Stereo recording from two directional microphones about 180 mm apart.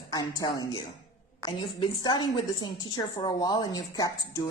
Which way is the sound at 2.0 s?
25° left (ahead or behind).